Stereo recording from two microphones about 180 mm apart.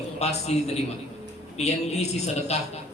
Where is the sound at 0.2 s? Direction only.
35° left (ahead or behind).